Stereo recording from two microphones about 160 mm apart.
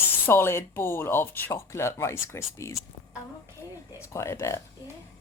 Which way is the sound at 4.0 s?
15° left (ahead or behind).